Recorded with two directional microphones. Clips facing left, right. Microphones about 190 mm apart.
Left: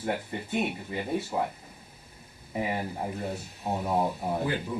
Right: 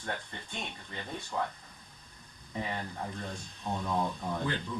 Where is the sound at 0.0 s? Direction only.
10° left (ahead or behind).